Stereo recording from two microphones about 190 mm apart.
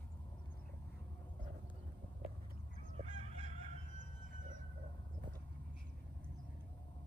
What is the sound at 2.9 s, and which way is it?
Fowl, 35° right (ahead or behind).